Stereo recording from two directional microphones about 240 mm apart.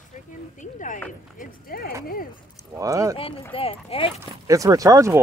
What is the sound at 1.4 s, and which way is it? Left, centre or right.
Clip-clop, left.